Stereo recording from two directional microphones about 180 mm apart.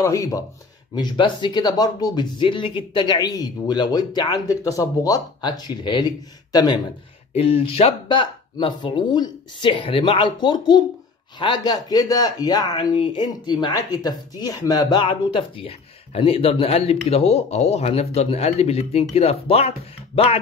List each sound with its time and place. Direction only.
0.0 s speech: 15° left (ahead or behind); by 19.7 s 35° left (ahead or behind)